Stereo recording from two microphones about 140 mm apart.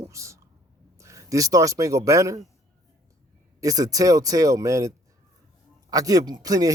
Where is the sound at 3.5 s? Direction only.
25° right (ahead or behind).